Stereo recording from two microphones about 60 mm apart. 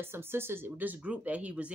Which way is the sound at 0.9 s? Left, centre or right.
Right.